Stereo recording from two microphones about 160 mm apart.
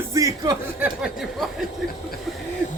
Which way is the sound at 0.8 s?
5° right (ahead or behind).